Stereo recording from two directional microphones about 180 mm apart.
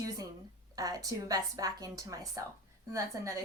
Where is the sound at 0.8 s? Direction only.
20° right (ahead or behind).